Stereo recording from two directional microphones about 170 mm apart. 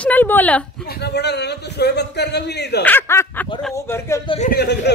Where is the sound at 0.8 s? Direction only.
70° left (ahead or behind).